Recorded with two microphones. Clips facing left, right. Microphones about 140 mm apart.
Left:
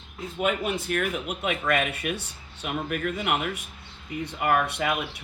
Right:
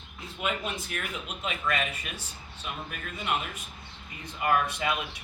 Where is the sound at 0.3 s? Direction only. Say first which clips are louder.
Left 6 dB; 50° left (ahead or behind).